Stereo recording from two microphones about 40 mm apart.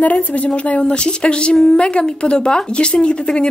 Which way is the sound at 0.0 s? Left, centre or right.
Left.